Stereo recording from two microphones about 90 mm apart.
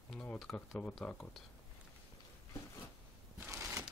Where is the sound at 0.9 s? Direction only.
5° left (ahead or behind).